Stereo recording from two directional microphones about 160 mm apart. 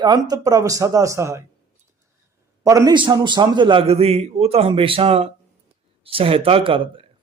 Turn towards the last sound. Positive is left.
turn(degrees=-35)  # may be behind; listen again after turning